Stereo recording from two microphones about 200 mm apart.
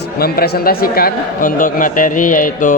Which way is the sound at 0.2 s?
50° left (ahead or behind).